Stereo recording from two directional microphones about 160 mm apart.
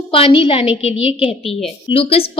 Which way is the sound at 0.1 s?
35° left (ahead or behind).